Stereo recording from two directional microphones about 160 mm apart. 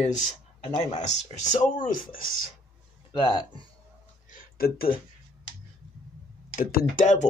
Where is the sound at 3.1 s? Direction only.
25° left (ahead or behind).